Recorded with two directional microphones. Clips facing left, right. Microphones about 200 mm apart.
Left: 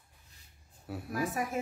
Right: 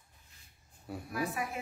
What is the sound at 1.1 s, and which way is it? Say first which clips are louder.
Speech: left 3 dB; 45° left (ahead or behind).